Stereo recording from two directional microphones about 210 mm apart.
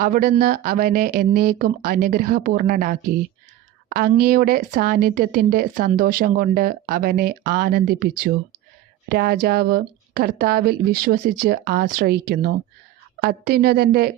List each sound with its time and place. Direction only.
0.0 s speech: 40° right (ahead or behind)